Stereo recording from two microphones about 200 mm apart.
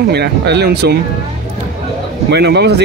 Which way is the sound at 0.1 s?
55° right (ahead or behind).